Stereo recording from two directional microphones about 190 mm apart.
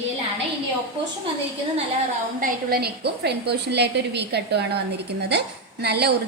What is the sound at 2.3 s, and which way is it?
A woman's voice, 55° right (ahead or behind).